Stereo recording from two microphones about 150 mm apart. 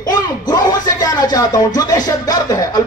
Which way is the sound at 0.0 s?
25° left (ahead or behind).